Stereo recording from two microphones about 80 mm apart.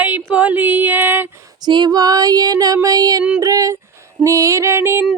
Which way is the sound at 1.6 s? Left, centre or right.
Right.